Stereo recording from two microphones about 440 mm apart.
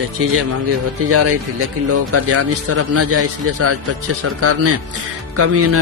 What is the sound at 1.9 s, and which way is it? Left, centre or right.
A man's voice, right.